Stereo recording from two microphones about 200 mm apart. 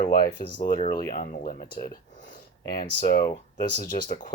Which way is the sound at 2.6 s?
45° left (ahead or behind).